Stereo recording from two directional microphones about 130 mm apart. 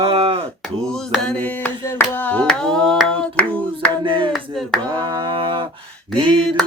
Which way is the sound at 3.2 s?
10° left (ahead or behind).